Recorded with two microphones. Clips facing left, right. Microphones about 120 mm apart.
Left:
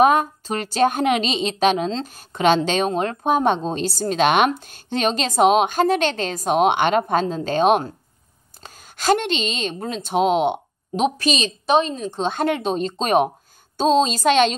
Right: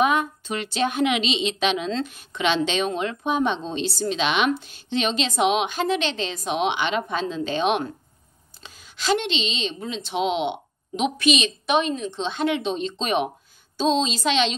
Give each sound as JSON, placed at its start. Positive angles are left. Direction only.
{"t": 0.0, "sound": "a woman's voice", "side_deg": 40}